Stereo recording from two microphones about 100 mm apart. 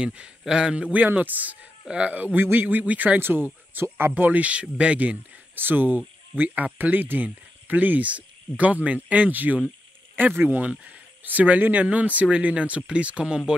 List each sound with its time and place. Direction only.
0.0 s speech: 10° right (ahead or behind)